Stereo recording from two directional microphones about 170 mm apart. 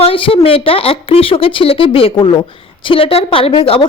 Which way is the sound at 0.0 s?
35° left (ahead or behind).